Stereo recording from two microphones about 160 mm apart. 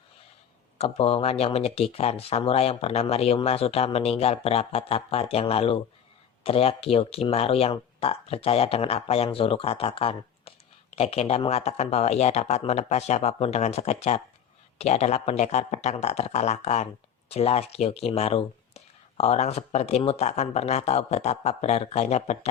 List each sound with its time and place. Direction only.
0.8 s speech: 40° left (ahead or behind)